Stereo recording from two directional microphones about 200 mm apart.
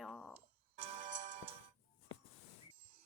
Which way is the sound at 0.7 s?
30° right (ahead or behind).